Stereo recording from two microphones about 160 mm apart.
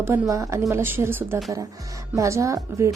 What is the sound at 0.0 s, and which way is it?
A woman's voice, 15° right (ahead or behind).